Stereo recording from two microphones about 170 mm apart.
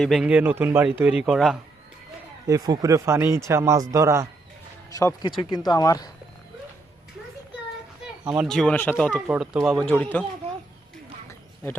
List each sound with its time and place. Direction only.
0.0 s speech: centre (ahead or behind)
2.5 s speech: 20° right (ahead or behind)
4.9 s speech: 20° left (ahead or behind)
8.3 s speech: centre (ahead or behind)
9.2 s speech: 5° right (ahead or behind)